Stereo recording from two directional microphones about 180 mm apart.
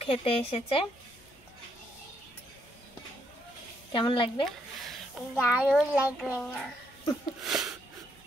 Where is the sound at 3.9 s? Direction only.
25° left (ahead or behind).